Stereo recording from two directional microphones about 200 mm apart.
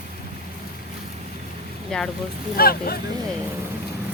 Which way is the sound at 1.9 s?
5° left (ahead or behind).